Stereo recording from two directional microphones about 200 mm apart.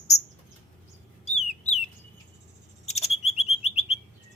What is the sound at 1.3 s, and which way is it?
Bird, 35° left (ahead or behind).